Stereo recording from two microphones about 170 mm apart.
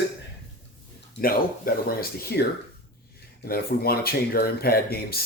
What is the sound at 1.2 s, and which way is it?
Speech, 60° left (ahead or behind).